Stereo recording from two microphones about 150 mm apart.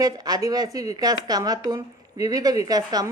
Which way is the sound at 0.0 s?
25° right (ahead or behind).